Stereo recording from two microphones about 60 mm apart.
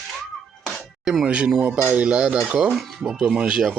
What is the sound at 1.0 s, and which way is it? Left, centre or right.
Speech, centre.